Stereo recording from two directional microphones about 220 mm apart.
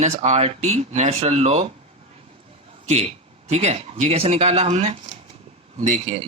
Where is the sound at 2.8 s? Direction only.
30° right (ahead or behind).